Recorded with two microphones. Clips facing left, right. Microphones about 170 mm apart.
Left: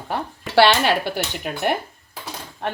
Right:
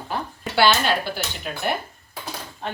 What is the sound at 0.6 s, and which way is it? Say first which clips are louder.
Speech: left 3 dB; 70° left (ahead or behind).